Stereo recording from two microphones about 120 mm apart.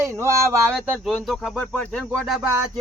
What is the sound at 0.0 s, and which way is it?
Speech, 25° right (ahead or behind).